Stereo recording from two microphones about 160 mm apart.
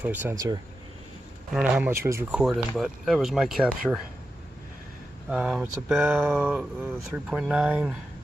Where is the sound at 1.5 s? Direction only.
10° right (ahead or behind).